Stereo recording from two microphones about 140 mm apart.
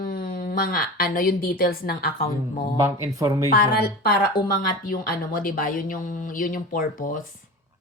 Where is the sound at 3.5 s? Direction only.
90° left; by 7.3 s 70° left (ahead or behind).